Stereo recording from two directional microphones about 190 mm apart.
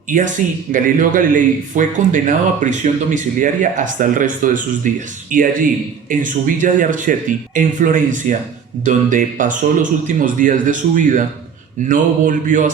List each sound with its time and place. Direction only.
0.1 s speech: 45° right (ahead or behind)